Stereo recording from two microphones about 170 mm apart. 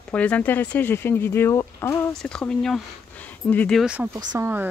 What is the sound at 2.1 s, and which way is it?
Speech, 5° left (ahead or behind).